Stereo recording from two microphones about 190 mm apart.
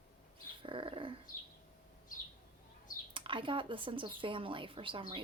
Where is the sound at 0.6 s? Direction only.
25° right (ahead or behind).